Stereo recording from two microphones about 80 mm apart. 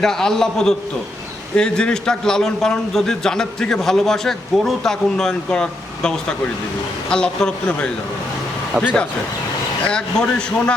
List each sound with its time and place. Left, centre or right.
0.0 s a man's voice: centre
8.8 s a man's voice: left